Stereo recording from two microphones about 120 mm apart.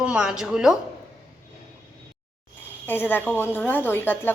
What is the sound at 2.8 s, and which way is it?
A woman's voice, 15° left (ahead or behind).